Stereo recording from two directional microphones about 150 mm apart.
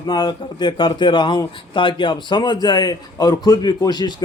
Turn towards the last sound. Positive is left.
turn(degrees=30)  # may be behind; listen again after turning